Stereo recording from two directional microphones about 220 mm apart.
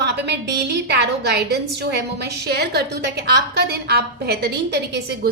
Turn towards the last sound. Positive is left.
turn(degrees=-50)  # may be behind; listen again after turning